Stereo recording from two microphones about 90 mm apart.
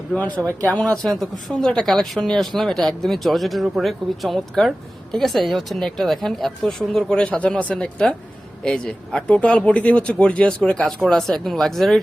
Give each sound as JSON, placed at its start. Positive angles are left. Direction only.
{"t": 0.6, "sound": "speech", "side_deg": 15}
{"t": 0.9, "sound": "speech", "side_deg": 5}